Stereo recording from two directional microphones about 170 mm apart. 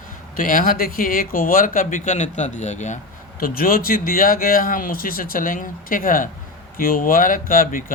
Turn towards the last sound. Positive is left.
turn(degrees=55)  # may be behind; listen again after turning